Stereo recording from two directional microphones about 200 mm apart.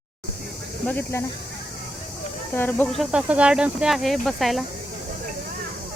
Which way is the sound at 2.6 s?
10° left (ahead or behind).